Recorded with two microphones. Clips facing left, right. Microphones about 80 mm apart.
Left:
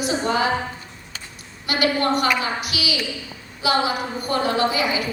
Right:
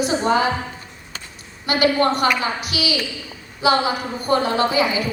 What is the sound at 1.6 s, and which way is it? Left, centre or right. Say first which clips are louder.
A woman's voice: right 4 dB; right.